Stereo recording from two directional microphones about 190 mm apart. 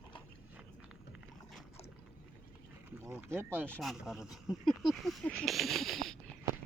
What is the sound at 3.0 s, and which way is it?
Speech, 15° right (ahead or behind).